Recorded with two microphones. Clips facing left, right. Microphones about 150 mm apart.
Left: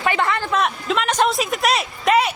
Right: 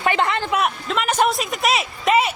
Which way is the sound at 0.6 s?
5° right (ahead or behind).